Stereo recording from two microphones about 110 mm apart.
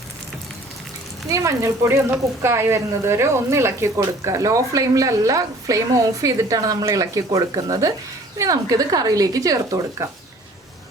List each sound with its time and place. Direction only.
1.3 s speech: 30° right (ahead or behind)